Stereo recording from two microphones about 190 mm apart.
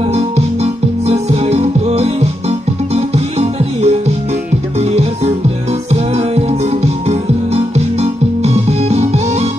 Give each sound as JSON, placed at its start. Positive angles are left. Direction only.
{"t": 0.1, "sound": "music", "side_deg": -35}